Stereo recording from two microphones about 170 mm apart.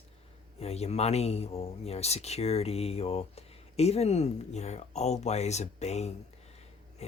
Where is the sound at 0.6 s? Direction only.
40° left (ahead or behind).